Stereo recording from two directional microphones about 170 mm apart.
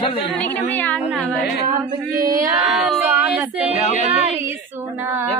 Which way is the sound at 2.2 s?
55° right (ahead or behind).